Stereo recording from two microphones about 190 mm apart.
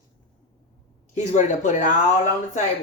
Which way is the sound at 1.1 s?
40° left (ahead or behind).